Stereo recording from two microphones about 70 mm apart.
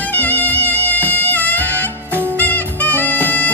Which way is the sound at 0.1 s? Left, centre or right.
Left.